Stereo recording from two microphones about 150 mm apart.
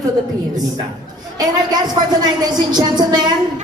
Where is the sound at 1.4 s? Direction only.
25° right (ahead or behind).